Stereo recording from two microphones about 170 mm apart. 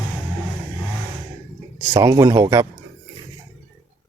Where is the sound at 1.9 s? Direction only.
20° right (ahead or behind).